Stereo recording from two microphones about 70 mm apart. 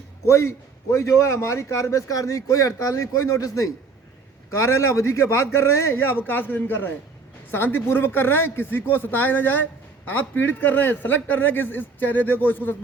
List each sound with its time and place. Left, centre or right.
0.3 s a man's voice: left